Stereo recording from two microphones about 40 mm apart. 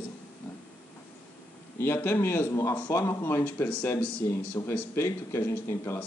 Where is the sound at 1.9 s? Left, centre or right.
Left.